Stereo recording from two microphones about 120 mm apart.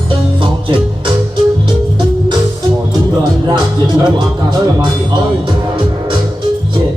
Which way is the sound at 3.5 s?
35° right (ahead or behind).